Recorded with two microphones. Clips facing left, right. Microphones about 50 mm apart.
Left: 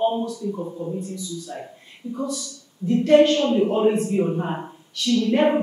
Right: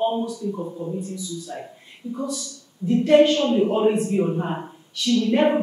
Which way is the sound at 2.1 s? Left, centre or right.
Centre.